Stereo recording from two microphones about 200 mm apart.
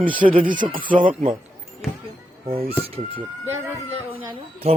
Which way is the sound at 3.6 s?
10° right (ahead or behind).